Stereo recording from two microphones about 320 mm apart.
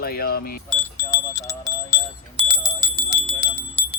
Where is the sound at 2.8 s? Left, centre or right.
Centre.